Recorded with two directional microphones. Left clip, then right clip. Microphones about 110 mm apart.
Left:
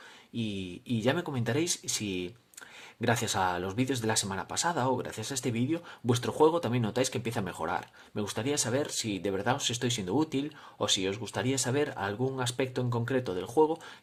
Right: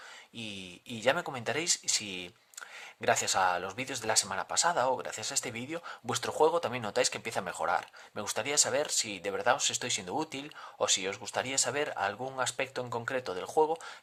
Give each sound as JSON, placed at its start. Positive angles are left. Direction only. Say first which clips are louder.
{"t": 0.3, "sound": "speech", "louder": "left 5 dB", "side_deg": -30}